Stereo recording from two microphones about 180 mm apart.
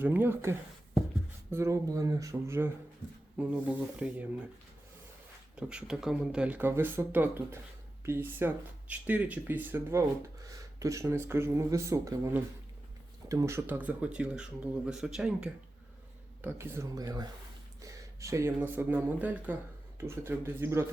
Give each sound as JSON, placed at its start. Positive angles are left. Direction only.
{"t": 0.0, "sound": "speech", "side_deg": -10}
{"t": 5.5, "sound": "speech", "side_deg": -5}